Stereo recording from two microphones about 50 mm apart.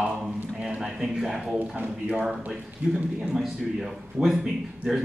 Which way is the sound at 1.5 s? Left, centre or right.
Right.